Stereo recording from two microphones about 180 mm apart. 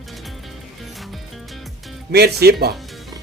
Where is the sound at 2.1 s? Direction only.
65° right (ahead or behind).